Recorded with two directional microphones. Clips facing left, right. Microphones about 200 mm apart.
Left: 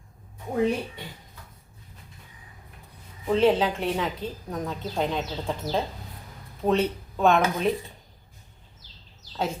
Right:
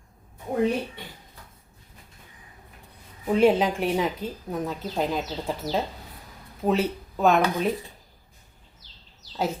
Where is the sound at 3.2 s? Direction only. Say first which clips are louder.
Right 1 dB; 10° right (ahead or behind).